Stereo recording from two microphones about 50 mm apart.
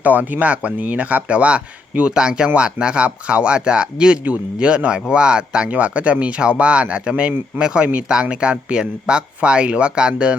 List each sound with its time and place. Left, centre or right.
0.0 s speech: right